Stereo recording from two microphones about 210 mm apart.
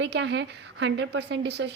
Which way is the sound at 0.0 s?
55° right (ahead or behind).